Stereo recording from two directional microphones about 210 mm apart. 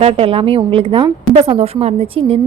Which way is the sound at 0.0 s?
25° right (ahead or behind).